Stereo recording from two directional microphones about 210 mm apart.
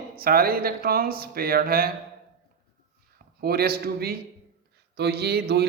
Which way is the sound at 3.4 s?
45° right (ahead or behind).